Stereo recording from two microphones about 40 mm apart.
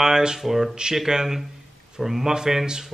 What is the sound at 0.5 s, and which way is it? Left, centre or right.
A man's voice, centre.